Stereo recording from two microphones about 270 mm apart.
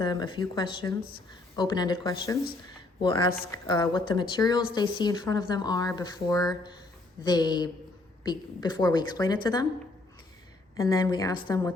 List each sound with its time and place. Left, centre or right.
0.0 s speech: centre
3.7 s speech: centre
10.8 s speech: centre